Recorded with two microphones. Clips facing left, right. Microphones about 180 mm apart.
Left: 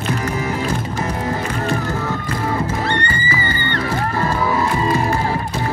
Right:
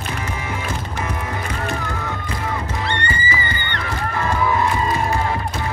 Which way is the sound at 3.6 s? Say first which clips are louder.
Left 5 dB; 40° left (ahead or behind).